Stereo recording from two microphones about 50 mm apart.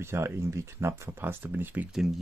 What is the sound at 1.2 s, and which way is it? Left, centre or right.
Speech, right.